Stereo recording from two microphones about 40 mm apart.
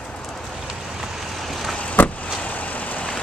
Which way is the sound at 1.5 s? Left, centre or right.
Centre.